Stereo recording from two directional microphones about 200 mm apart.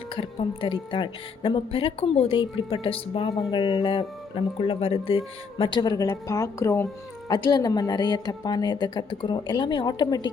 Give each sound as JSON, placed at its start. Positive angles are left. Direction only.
{"t": 0.2, "sound": "a woman's voice", "side_deg": 25}